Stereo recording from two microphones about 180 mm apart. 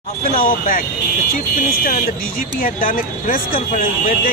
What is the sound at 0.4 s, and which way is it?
Speech, 50° left (ahead or behind).